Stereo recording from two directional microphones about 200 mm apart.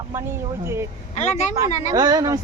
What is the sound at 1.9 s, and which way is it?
Speech, 20° right (ahead or behind).